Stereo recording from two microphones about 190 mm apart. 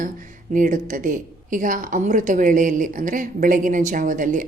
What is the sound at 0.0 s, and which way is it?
A woman's voice, 45° right (ahead or behind).